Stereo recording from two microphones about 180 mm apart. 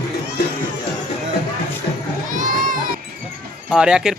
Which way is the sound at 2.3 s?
50° right (ahead or behind).